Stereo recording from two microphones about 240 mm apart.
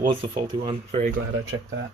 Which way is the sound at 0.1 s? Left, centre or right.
Right.